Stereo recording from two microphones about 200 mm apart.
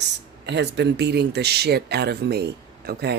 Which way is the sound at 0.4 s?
60° right (ahead or behind).